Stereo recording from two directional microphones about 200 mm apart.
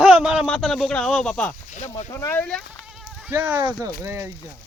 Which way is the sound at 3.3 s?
10° right (ahead or behind).